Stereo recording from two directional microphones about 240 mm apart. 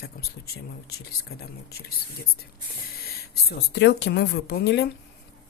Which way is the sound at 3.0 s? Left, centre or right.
Left.